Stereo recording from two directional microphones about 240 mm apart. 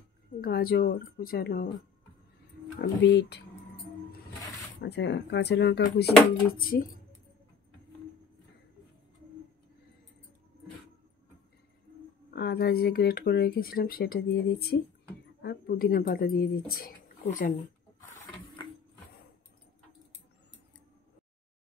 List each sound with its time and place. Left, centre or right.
0.4 s speech: left
2.8 s speech: left
4.8 s speech: left
12.3 s speech: left